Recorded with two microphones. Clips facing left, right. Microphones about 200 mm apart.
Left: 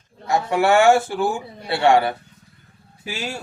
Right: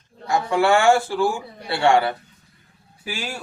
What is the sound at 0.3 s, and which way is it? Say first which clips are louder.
A man's voice: left 1 dB; 20° left (ahead or behind).